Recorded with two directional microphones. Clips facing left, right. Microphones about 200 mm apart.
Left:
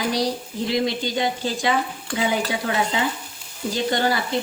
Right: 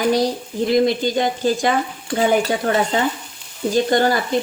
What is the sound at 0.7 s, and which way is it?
A woman's voice, 50° right (ahead or behind).